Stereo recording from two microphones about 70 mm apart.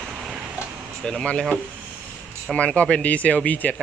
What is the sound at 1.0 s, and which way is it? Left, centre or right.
Speech, centre.